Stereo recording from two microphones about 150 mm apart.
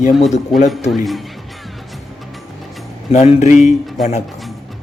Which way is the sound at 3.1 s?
45° left (ahead or behind).